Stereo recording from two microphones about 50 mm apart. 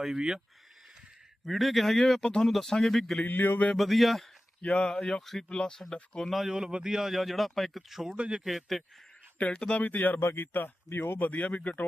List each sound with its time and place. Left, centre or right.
0.0 s speech: centre
1.5 s speech: centre
3.2 s speech: left
3.8 s speech: centre
4.6 s speech: left; by 5.5 s centre
5.5 s speech: centre
6.3 s speech: centre
7.1 s speech: centre
8.1 s a man's voice: right
8.4 s speech: centre
9.4 s speech: left
9.8 s speech: left
10.2 s speech: left
11.3 s speech: left